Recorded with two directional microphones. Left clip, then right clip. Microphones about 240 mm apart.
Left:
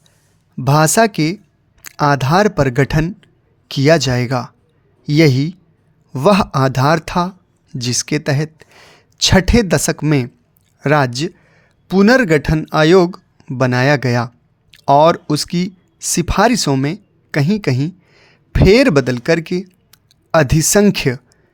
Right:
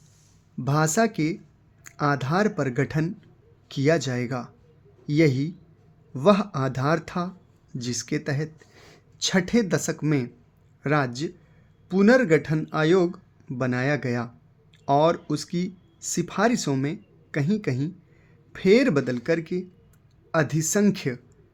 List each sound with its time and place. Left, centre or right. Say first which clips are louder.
0.6 s speech: left 11 dB; left